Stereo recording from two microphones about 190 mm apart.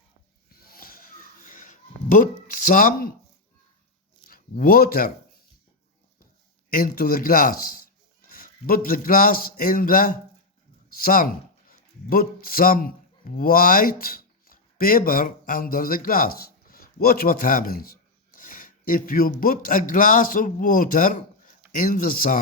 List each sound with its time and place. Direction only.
0.6 s a sound: 50° left (ahead or behind)
4.3 s speech: 50° left (ahead or behind)
6.7 s a man's voice: 50° left (ahead or behind)